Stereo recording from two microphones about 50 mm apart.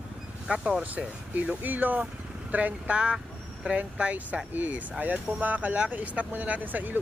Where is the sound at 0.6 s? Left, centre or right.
Right.